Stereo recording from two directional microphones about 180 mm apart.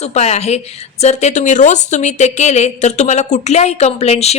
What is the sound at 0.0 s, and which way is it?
A woman's voice, 35° left (ahead or behind).